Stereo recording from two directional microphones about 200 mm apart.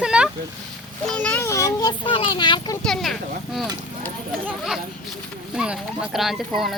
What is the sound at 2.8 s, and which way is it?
Speech, centre (ahead or behind).